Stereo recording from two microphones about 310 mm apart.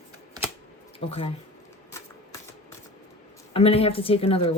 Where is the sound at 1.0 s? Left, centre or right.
Centre.